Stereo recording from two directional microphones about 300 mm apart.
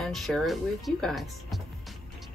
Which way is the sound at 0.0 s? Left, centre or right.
Centre.